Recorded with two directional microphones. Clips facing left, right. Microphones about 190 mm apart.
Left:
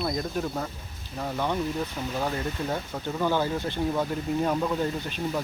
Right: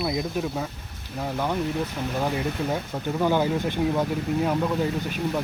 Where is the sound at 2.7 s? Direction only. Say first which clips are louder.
Right 3 dB; 15° right (ahead or behind).